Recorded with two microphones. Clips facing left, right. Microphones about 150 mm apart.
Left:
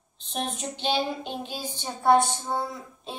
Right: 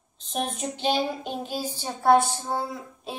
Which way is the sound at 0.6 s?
45° right (ahead or behind).